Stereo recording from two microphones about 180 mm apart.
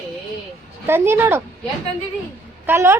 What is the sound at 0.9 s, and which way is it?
Speech, 15° right (ahead or behind).